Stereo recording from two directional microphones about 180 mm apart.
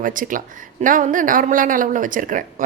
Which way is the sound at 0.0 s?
50° right (ahead or behind).